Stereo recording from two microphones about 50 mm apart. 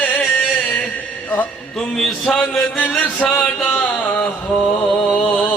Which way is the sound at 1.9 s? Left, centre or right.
Centre.